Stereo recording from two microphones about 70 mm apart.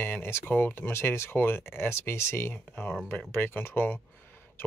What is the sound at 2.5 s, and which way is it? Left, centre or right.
Speech, left.